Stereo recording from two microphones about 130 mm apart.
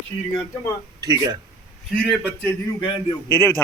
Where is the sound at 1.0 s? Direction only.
30° right (ahead or behind).